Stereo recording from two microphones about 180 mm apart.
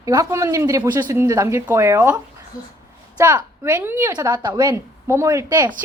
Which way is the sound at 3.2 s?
20° right (ahead or behind).